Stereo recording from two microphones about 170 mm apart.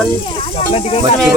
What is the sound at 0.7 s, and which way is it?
Speech, 35° left (ahead or behind).